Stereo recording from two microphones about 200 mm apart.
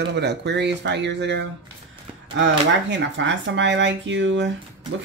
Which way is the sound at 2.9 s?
65° right (ahead or behind).